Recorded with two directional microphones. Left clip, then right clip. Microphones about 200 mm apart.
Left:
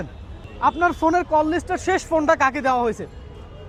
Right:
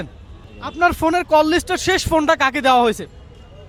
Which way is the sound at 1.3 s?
30° right (ahead or behind).